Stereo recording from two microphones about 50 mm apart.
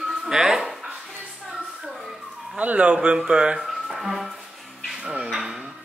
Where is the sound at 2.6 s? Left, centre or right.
Right.